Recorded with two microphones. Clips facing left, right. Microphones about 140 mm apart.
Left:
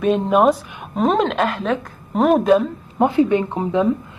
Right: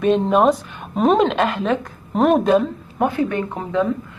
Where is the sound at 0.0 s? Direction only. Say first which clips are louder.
Even; 5° left (ahead or behind).